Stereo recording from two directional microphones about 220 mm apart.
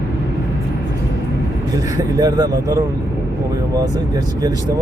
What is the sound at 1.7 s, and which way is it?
Speech, 15° right (ahead or behind).